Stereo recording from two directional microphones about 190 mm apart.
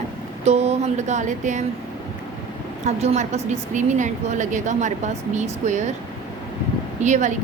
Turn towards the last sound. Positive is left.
turn(degrees=-40)  # may be behind; listen again after turning